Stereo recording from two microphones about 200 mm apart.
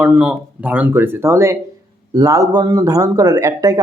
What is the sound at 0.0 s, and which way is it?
A man's voice, 5° right (ahead or behind).